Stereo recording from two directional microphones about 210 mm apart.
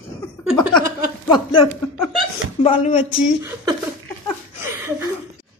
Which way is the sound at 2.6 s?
30° left (ahead or behind).